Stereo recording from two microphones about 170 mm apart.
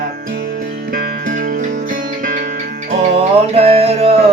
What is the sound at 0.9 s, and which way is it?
Music, 55° right (ahead or behind).